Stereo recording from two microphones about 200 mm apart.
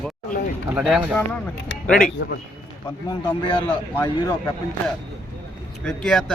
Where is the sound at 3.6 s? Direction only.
15° left (ahead or behind).